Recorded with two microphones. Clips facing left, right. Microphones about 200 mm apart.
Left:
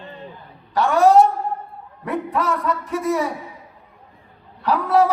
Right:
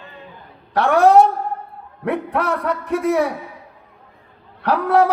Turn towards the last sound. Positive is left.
turn(degrees=-60)  # may be behind; listen again after turning